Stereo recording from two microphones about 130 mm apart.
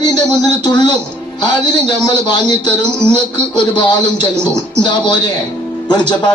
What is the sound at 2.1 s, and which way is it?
Speech, 35° left (ahead or behind).